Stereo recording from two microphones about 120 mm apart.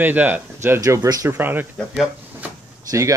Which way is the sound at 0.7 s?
30° right (ahead or behind).